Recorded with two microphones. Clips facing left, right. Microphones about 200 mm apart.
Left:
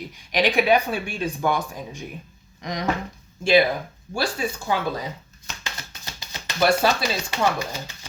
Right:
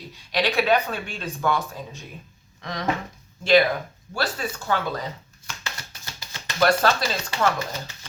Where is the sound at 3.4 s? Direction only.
10° left (ahead or behind).